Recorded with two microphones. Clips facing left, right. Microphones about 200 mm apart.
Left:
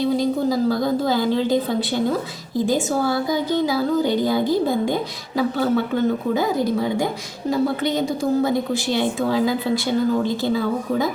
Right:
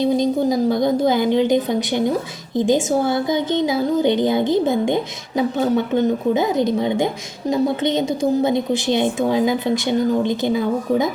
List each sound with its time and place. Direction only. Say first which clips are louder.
0.0 s a woman's voice: right 2 dB; 20° right (ahead or behind)